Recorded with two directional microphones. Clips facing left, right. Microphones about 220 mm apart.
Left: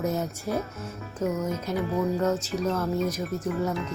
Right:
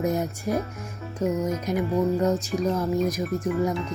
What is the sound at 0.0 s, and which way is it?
Speech, 15° right (ahead or behind).